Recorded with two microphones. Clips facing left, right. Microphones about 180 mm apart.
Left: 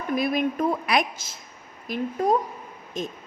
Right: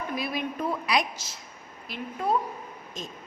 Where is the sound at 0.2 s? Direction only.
50° left (ahead or behind).